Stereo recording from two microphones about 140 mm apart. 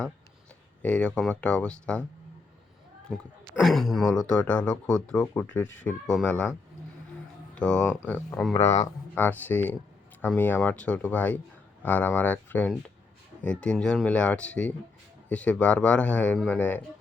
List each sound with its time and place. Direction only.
0.8 s speech: 10° left (ahead or behind)
3.1 s speech: centre (ahead or behind)
7.5 s speech: 5° left (ahead or behind)
8.5 s speech: 50° left (ahead or behind)
9.1 s speech: 15° left (ahead or behind)